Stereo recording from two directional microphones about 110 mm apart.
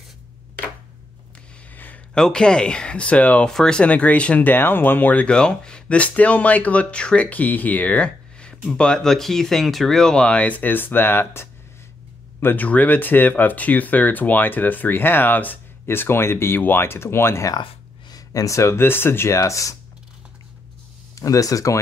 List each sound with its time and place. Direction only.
1.7 s speech: 15° left (ahead or behind); by 19.8 s 30° left (ahead or behind)
21.1 s speech: 30° left (ahead or behind)